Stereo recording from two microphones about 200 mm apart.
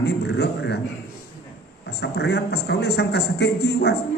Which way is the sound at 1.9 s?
55° left (ahead or behind).